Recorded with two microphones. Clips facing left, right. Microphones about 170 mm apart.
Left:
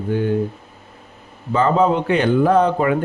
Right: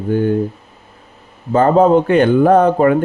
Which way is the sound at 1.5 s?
50° right (ahead or behind).